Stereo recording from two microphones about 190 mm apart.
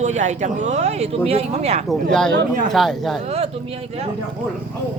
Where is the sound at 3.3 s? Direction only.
30° right (ahead or behind).